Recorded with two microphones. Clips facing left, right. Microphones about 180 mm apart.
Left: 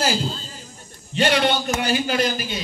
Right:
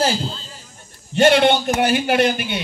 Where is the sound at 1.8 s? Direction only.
60° right (ahead or behind).